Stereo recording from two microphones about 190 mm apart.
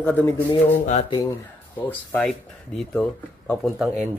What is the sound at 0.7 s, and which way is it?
Speech, 35° left (ahead or behind).